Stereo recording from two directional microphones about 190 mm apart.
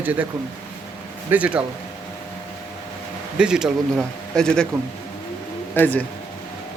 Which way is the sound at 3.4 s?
5° right (ahead or behind).